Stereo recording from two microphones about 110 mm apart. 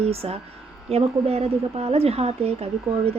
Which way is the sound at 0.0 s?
65° right (ahead or behind).